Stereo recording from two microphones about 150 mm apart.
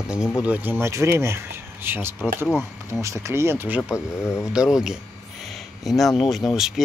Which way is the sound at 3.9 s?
15° left (ahead or behind).